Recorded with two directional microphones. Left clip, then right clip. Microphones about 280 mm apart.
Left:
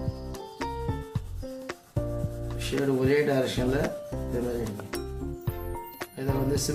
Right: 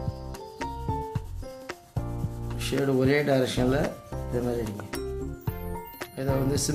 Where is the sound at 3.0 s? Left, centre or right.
Right.